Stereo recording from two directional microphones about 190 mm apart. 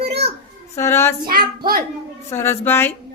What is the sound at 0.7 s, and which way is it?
Speech, 15° left (ahead or behind).